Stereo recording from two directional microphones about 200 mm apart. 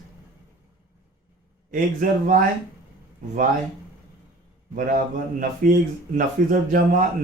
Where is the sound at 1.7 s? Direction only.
40° right (ahead or behind).